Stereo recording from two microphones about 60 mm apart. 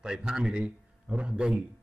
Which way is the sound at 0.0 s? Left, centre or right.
Centre.